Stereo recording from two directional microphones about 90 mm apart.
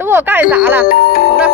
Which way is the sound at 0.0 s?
20° right (ahead or behind).